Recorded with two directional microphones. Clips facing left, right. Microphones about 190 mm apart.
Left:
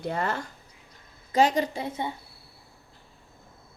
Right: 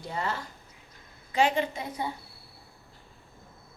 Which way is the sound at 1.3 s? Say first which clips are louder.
Left 3 dB; 40° left (ahead or behind).